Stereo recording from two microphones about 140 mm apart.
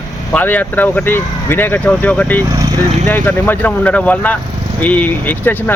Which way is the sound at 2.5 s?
25° right (ahead or behind).